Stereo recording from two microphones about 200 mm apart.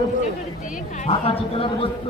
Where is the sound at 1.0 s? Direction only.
30° left (ahead or behind).